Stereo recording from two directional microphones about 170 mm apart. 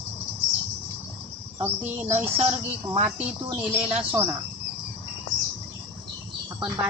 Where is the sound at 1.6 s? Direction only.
10° right (ahead or behind).